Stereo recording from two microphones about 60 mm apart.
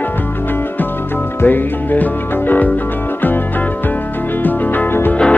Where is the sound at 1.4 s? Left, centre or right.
Left.